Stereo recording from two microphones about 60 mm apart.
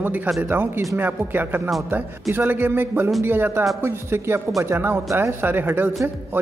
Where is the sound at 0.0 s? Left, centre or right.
Right.